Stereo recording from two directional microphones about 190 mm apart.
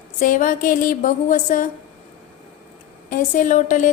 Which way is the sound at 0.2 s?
45° left (ahead or behind).